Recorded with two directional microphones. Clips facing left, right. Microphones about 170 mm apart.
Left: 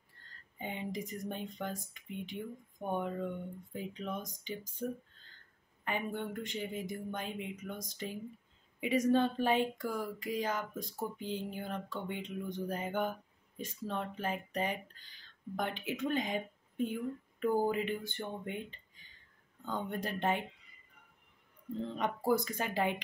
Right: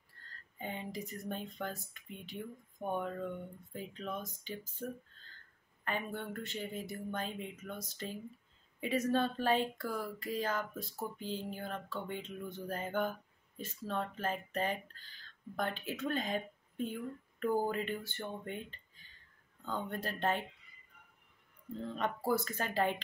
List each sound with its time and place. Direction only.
0.2 s a sound: 20° left (ahead or behind)
0.6 s speech: 15° left (ahead or behind)
5.9 s speech: 15° left (ahead or behind)
21.8 s speech: 15° left (ahead or behind)